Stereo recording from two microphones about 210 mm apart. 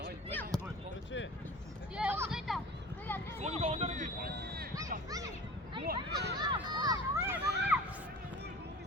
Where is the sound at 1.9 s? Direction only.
5° right (ahead or behind).